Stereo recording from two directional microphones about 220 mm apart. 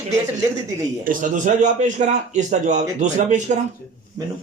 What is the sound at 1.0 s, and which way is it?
A man's voice, 35° right (ahead or behind).